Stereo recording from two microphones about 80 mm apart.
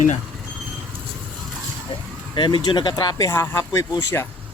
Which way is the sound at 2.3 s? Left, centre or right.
Left.